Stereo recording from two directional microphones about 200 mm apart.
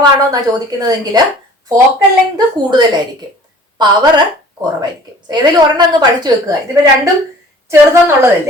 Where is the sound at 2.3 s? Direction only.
20° right (ahead or behind).